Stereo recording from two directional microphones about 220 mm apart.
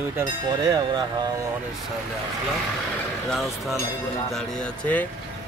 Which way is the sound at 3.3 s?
Centre (ahead or behind).